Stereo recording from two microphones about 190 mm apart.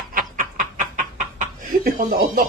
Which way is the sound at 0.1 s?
45° right (ahead or behind).